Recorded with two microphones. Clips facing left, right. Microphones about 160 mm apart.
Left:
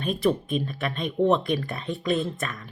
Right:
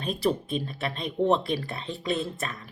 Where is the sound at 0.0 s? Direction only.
30° right (ahead or behind).